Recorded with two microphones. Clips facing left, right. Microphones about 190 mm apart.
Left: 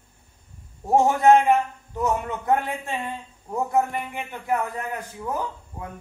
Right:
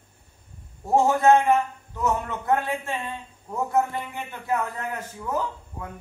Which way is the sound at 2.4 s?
15° left (ahead or behind).